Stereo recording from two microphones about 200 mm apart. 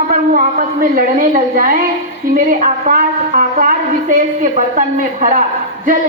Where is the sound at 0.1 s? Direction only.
45° right (ahead or behind).